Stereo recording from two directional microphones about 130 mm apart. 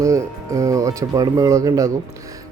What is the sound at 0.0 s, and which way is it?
A man's voice, 25° right (ahead or behind).